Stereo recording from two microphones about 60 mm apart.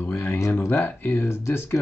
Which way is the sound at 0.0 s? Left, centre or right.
Left.